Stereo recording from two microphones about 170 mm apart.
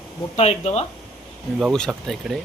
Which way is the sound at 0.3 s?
40° left (ahead or behind).